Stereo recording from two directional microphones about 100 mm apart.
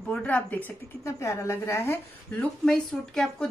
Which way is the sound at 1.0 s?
30° left (ahead or behind).